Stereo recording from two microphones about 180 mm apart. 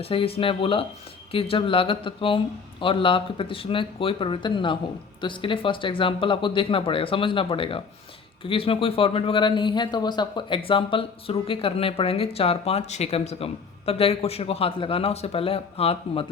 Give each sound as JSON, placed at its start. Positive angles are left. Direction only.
{"t": 0.0, "sound": "a man's voice", "side_deg": 30}